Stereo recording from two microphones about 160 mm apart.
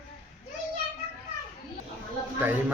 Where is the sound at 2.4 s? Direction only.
10° right (ahead or behind).